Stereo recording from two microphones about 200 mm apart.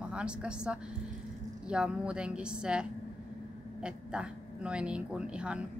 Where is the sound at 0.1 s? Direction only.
5° right (ahead or behind).